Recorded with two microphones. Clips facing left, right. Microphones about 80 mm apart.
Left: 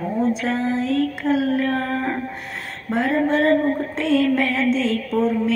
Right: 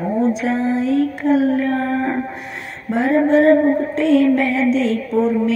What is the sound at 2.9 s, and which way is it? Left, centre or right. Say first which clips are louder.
Female singing: right 5 dB; centre.